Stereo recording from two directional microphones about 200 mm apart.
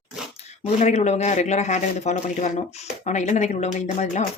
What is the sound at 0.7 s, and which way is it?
Speech, 35° left (ahead or behind).